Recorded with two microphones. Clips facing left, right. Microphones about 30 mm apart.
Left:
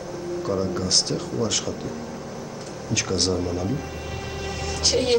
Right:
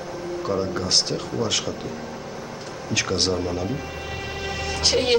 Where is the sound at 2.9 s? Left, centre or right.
Right.